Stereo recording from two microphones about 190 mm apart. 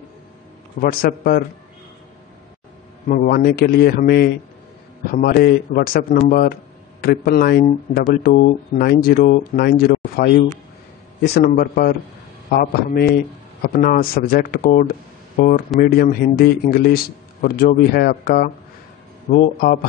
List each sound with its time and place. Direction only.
0.7 s a man's voice: 50° left (ahead or behind)
3.2 s a man's voice: 50° left (ahead or behind)